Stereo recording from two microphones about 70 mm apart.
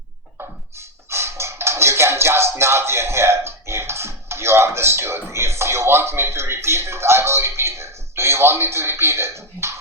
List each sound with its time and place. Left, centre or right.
1.1 s music: right